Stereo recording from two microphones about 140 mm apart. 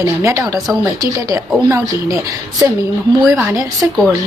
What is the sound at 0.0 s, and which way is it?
Speech, 20° right (ahead or behind).